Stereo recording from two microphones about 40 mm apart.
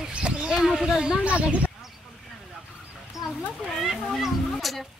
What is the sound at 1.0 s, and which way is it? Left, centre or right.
Speech, right.